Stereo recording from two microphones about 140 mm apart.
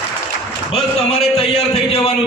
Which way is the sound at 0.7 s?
45° left (ahead or behind).